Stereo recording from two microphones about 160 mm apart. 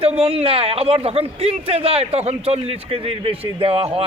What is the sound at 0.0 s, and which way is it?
Speech, 35° right (ahead or behind).